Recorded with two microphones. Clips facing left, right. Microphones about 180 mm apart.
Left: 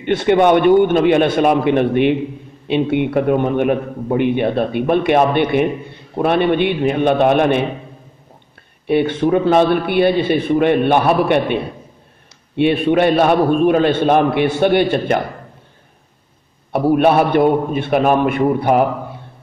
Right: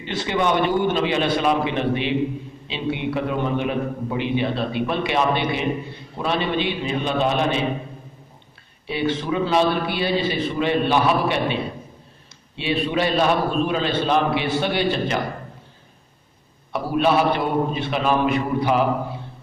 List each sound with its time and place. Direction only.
0.0 s a man's voice: 60° left (ahead or behind)
8.8 s a man's voice: 55° left (ahead or behind)
16.7 s a man's voice: 55° left (ahead or behind)